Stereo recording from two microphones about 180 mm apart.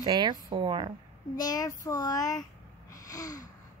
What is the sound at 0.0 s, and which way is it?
Speech, 25° right (ahead or behind).